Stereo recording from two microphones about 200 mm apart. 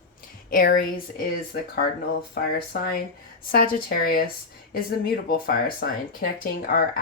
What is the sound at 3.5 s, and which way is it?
Speech, 45° left (ahead or behind).